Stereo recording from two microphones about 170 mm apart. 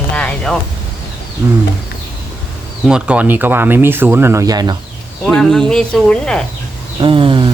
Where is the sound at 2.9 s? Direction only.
5° right (ahead or behind); by 4.7 s 20° right (ahead or behind).